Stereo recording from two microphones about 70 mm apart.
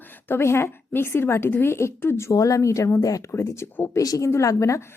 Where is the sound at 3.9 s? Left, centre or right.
Left.